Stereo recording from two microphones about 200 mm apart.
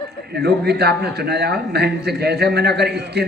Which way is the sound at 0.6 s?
55° right (ahead or behind).